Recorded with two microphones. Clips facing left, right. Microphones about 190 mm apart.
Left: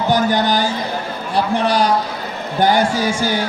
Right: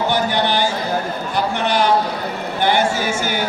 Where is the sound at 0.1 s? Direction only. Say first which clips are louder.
Left 3 dB; 40° left (ahead or behind).